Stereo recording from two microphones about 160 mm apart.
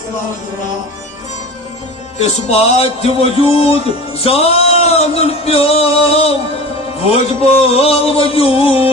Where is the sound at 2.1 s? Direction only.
40° left (ahead or behind).